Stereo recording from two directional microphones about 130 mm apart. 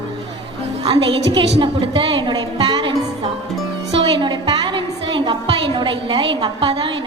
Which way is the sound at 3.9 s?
40° right (ahead or behind).